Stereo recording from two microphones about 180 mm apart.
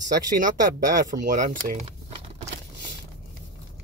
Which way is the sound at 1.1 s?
45° right (ahead or behind).